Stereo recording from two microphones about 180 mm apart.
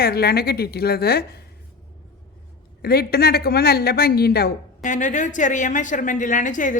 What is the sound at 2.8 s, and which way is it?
Speech, 60° left (ahead or behind).